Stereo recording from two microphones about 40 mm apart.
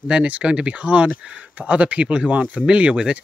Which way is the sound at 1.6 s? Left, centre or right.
Right.